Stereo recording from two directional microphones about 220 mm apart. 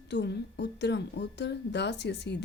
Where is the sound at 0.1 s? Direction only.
50° left (ahead or behind).